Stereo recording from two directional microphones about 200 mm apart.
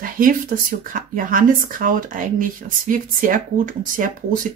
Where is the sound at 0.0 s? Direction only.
45° right (ahead or behind).